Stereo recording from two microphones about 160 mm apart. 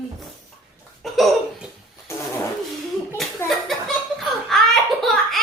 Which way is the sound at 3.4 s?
15° left (ahead or behind).